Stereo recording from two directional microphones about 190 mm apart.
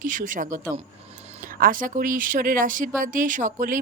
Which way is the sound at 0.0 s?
45° right (ahead or behind).